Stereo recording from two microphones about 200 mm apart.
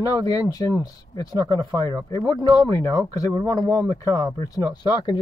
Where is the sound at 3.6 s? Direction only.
15° left (ahead or behind).